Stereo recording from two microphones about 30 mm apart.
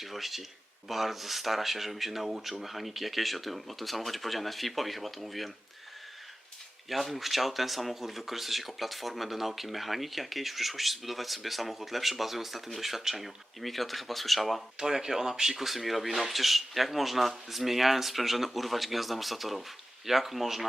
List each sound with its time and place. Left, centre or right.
0.0 s speech: centre
6.9 s speech: centre
14.9 s speech: centre
15.5 s speech: centre